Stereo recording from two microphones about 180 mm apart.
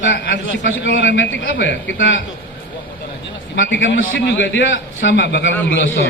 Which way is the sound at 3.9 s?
80° left.